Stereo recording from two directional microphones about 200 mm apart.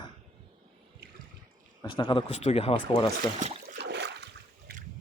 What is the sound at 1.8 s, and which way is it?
Speech, 25° left (ahead or behind).